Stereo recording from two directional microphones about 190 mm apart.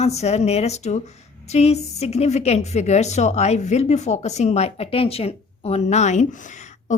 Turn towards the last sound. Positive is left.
turn(degrees=40)  # may be behind; listen again after turning